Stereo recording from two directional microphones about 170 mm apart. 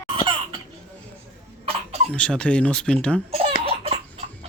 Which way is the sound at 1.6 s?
35° right (ahead or behind).